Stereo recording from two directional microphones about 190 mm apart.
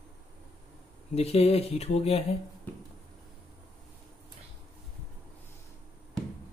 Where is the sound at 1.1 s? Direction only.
35° left (ahead or behind).